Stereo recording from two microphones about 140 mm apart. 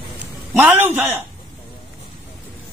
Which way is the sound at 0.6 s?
10° right (ahead or behind).